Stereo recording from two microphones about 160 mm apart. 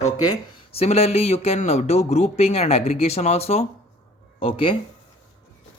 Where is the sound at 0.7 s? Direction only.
40° left (ahead or behind).